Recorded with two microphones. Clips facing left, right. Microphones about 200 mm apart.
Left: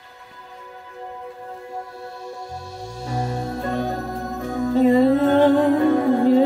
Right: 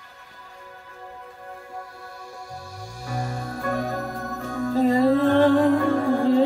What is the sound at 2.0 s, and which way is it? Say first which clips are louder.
Music: left 6 dB; 25° left (ahead or behind).